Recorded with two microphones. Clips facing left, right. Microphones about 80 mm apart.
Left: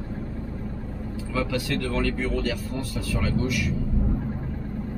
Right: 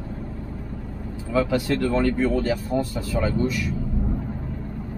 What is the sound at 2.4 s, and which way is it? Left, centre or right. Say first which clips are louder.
Speech: right 5 dB; right.